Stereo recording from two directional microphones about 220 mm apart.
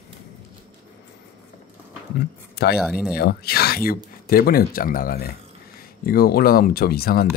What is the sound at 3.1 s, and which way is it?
Speech, 45° left (ahead or behind).